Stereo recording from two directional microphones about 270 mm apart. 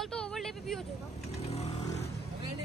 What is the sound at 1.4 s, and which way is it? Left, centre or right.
Vehicle, left.